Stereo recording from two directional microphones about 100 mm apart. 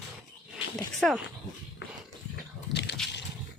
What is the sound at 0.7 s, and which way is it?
Dog, centre (ahead or behind).